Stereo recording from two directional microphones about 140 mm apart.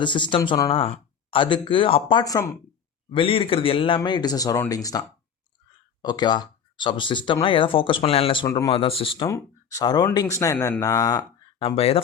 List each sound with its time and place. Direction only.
0.0 s speech: 35° left (ahead or behind)
2.2 s speech: 25° left (ahead or behind)
3.1 s speech: 40° left (ahead or behind)
8.4 s speech: 25° left (ahead or behind)
8.7 s speech: 40° left (ahead or behind)
9.2 s speech: 25° left (ahead or behind)
11.6 s speech: 40° left (ahead or behind)